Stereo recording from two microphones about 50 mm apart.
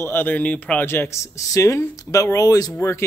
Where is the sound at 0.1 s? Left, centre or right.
Left.